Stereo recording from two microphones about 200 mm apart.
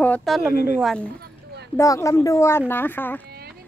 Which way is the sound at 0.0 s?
5° left (ahead or behind).